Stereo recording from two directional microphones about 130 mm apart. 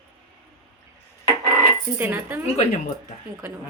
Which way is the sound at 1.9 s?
15° right (ahead or behind).